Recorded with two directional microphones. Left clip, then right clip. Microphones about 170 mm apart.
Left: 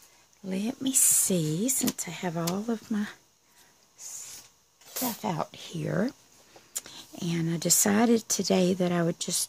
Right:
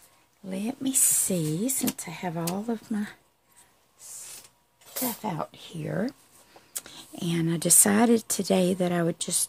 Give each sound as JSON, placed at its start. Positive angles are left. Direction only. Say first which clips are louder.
{"t": 0.5, "sound": "speech", "louder": "even", "side_deg": 25}
{"t": 5.2, "sound": "speech", "louder": "left 1 dB", "side_deg": 55}
{"t": 6.7, "sound": "speech", "louder": "even", "side_deg": 5}